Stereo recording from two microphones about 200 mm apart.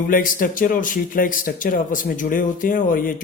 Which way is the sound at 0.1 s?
45° left (ahead or behind).